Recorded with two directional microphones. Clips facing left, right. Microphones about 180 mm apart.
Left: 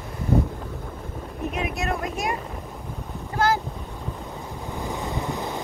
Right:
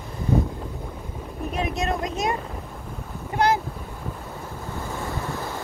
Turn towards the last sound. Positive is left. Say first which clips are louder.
# left 2 dB
turn(degrees=20)  # may be behind; listen again after turning